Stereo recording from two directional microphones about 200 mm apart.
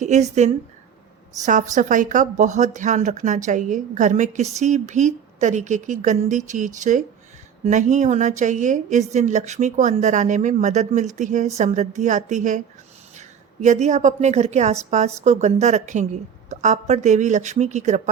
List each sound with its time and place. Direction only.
0.0 s a woman's voice: 35° right (ahead or behind)